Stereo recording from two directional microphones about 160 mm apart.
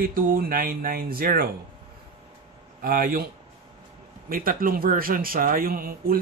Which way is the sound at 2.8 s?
60° right (ahead or behind).